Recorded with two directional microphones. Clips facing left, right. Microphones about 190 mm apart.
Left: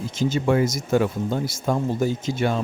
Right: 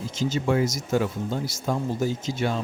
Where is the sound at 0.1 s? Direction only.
55° left (ahead or behind).